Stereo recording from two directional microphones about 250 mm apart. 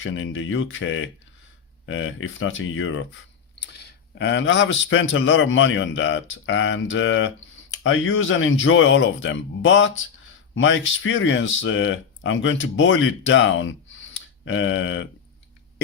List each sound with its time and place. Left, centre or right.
0.0 s speech: left